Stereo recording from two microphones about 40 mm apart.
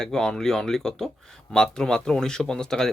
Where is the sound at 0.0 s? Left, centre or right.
Centre.